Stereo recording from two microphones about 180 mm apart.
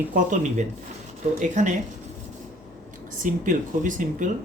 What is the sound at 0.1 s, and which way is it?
Speech, 45° right (ahead or behind).